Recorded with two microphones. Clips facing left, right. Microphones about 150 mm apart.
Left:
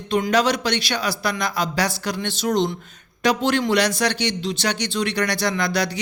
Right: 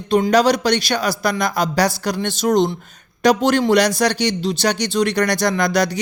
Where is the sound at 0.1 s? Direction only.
35° right (ahead or behind).